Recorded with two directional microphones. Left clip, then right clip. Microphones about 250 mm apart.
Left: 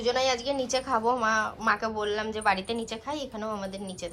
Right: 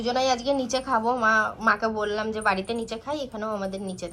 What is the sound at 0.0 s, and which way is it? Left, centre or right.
A woman's voice, centre.